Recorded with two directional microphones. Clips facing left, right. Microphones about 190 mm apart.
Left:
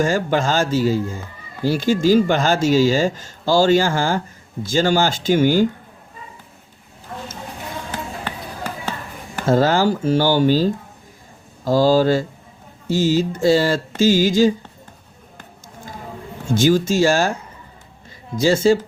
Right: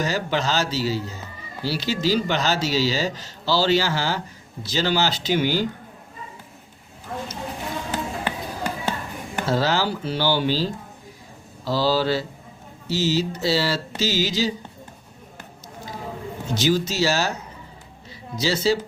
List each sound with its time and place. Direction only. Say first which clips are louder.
0.0 s speech: left 6 dB; 50° left (ahead or behind)
7.9 s music: right 2 dB; 10° right (ahead or behind)
9.5 s speech: left 7 dB; 50° left (ahead or behind)
16.5 s speech: left 6 dB; 50° left (ahead or behind)
18.3 s speech: left 7 dB; 50° left (ahead or behind)